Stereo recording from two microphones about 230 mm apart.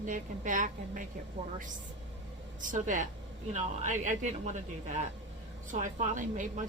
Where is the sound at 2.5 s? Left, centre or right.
Right.